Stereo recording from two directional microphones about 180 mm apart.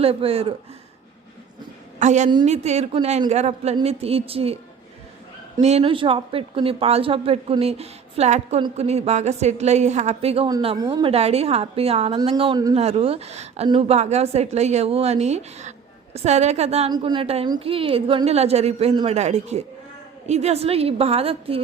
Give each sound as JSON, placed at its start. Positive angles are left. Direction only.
{"t": 0.0, "sound": "speech", "side_deg": -30}
{"t": 2.0, "sound": "speech", "side_deg": -40}
{"t": 10.8, "sound": "speech", "side_deg": -20}
{"t": 11.1, "sound": "speech", "side_deg": -35}
{"t": 12.7, "sound": "speech", "side_deg": -35}